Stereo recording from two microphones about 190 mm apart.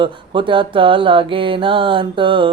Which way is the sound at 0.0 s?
25° right (ahead or behind).